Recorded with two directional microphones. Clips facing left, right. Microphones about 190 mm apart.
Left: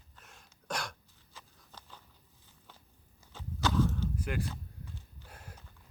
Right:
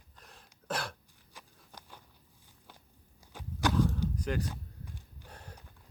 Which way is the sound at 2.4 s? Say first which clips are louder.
Right 1 dB; 15° right (ahead or behind).